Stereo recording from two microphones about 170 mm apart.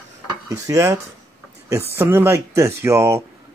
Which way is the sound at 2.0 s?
15° right (ahead or behind).